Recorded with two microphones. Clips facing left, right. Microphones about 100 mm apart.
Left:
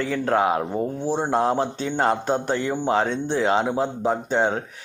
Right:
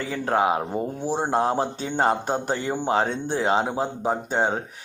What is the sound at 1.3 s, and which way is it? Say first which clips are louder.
Speech: left 1 dB; 30° right (ahead or behind).